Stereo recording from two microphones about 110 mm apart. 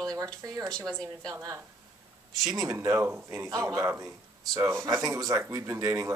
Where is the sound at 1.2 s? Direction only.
35° right (ahead or behind).